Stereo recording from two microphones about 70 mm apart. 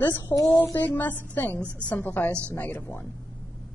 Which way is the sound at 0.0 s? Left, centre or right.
Left.